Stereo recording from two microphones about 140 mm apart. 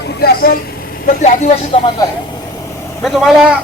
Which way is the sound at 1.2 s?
60° left (ahead or behind).